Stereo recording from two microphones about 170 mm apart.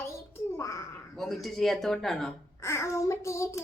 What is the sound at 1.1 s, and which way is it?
Speech, centre (ahead or behind).